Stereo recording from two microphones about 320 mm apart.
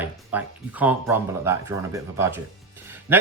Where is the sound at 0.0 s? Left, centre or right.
Centre.